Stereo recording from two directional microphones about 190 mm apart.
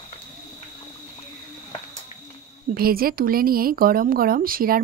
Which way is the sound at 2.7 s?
50° right (ahead or behind).